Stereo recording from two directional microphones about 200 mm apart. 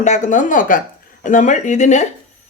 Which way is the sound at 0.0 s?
35° left (ahead or behind).